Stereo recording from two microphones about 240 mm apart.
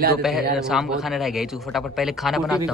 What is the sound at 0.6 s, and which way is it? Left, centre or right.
Speech, centre.